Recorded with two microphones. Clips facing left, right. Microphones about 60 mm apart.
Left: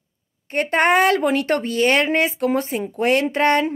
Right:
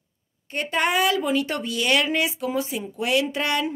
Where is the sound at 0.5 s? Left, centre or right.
Left.